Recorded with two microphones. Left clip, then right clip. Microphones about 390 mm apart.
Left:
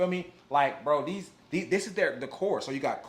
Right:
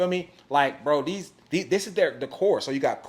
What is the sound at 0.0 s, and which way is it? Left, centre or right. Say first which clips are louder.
Speech: right 4 dB; right.